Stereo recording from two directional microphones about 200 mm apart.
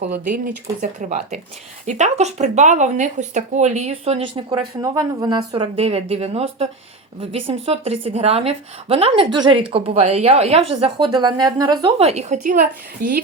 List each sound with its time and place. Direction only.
0.0 s a woman's voice: 40° right (ahead or behind)